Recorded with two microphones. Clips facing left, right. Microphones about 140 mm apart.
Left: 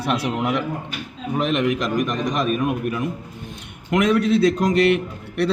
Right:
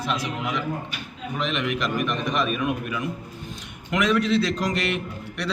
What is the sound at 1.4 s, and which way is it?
A man's voice, 45° left (ahead or behind).